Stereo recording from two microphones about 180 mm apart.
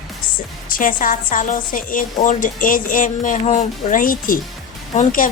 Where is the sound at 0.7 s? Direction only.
50° left (ahead or behind).